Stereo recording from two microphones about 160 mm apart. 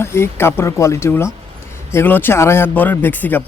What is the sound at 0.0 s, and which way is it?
Speech, 15° left (ahead or behind).